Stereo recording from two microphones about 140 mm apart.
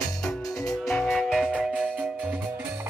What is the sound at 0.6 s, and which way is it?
Music, 5° left (ahead or behind).